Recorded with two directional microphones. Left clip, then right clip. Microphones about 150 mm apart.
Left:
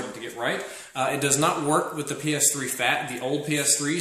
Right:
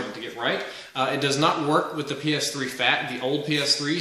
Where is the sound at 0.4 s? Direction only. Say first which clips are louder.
Right 2 dB; 15° left (ahead or behind).